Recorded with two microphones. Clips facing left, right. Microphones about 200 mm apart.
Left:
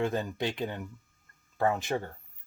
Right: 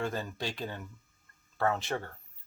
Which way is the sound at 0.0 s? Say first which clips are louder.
Left 5 dB; 20° left (ahead or behind).